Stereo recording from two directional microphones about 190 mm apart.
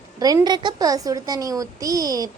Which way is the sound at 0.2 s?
20° right (ahead or behind).